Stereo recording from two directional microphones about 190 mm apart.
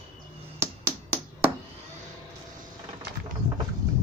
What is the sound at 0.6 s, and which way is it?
Music, 15° right (ahead or behind).